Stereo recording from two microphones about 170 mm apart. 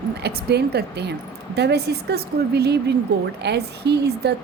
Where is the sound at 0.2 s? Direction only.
70° right (ahead or behind).